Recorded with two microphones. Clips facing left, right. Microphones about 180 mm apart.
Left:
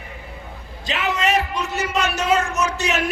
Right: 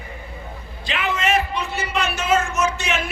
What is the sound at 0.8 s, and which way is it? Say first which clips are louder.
A man's voice: left 1 dB; 40° left (ahead or behind).